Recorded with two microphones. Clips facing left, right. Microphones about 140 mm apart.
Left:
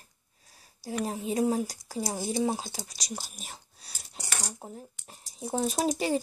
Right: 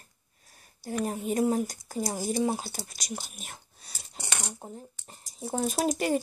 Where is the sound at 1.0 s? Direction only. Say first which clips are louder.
Right 1 dB; centre (ahead or behind).